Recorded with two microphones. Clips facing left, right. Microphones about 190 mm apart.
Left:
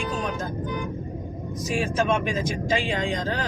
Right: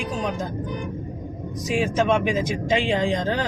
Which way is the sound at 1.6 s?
15° right (ahead or behind).